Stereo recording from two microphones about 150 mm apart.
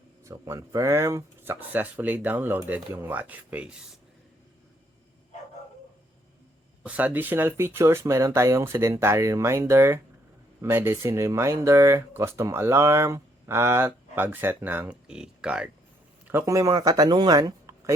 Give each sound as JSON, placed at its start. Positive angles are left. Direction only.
{"t": 0.3, "sound": "speech", "side_deg": -20}
{"t": 6.8, "sound": "speech", "side_deg": -10}